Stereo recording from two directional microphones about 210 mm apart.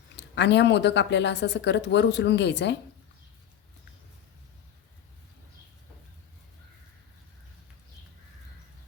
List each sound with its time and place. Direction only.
0.2 s speech: 55° left (ahead or behind)